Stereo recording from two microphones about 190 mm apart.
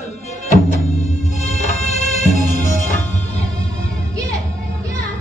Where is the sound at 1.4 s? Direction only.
35° left (ahead or behind).